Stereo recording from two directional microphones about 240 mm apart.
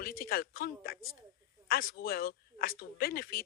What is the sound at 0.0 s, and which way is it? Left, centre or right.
A woman's voice, left.